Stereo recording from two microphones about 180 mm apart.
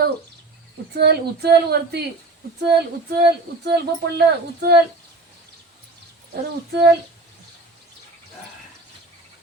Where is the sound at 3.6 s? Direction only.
65° right (ahead or behind).